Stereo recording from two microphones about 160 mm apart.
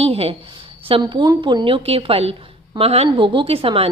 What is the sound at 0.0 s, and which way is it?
A woman's voice, 40° right (ahead or behind).